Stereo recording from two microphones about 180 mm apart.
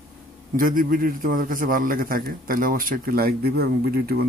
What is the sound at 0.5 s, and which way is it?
A man's voice, 50° right (ahead or behind).